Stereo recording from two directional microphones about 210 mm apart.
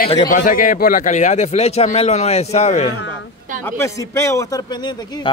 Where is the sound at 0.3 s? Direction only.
40° left (ahead or behind).